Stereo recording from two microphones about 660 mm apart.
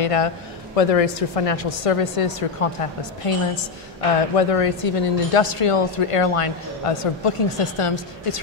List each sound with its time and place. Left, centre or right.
0.0 s a man's voice: left